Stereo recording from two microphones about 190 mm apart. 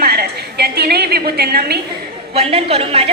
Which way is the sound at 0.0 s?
55° right (ahead or behind).